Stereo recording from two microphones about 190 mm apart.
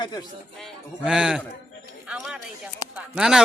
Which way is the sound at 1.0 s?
5° right (ahead or behind).